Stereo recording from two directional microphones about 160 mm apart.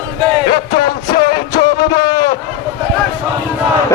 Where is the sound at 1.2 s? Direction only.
25° left (ahead or behind).